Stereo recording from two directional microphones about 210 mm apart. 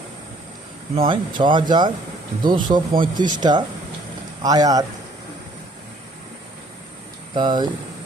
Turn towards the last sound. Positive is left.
turn(degrees=-20)  # may be behind; listen again after turning